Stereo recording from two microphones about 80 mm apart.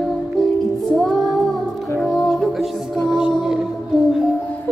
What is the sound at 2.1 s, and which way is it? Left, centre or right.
Music, centre.